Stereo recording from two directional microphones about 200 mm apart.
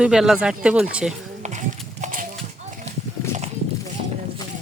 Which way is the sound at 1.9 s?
35° right (ahead or behind).